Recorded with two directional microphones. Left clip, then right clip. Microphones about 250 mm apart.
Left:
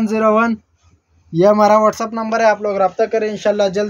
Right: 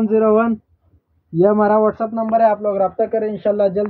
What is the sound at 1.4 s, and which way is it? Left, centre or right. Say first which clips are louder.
A man's voice: left 3 dB; left.